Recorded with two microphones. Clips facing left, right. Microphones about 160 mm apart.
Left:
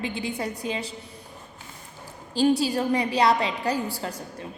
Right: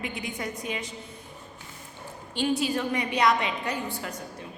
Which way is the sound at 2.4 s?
35° left (ahead or behind).